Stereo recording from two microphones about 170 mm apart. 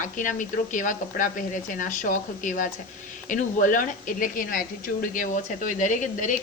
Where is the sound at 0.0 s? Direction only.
50° left (ahead or behind).